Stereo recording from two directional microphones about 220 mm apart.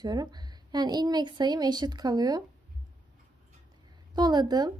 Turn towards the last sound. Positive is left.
turn(degrees=-15)  # may be behind; listen again after turning